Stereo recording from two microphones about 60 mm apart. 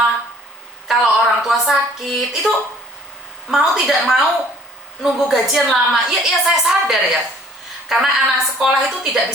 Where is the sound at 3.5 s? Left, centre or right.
Centre.